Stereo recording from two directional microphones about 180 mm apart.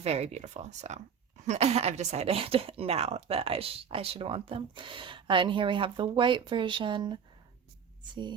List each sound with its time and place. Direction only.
0.0 s speech: 35° right (ahead or behind)